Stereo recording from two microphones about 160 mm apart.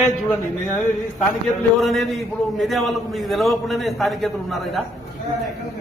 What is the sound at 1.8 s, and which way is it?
A man's voice, centre (ahead or behind).